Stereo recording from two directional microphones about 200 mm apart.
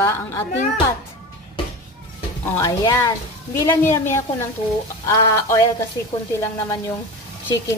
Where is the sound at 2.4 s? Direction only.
15° left (ahead or behind).